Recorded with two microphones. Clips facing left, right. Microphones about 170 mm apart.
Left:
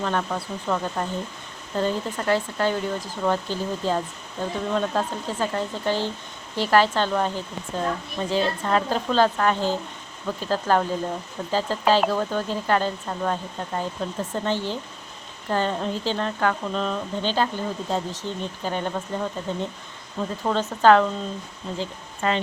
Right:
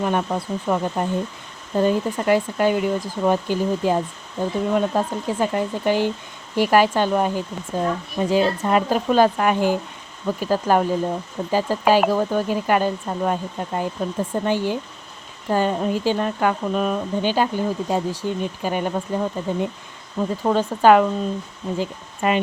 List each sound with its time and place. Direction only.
0.0 s speech: 15° right (ahead or behind)